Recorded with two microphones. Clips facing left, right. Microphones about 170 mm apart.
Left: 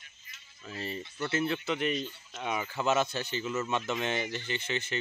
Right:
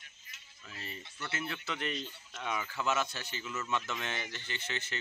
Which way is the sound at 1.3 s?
25° left (ahead or behind).